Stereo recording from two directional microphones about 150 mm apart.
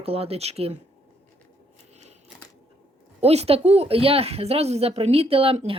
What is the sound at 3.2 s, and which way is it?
Speech, 45° right (ahead or behind).